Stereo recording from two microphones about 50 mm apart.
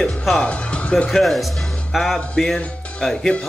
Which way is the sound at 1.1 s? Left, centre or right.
Centre.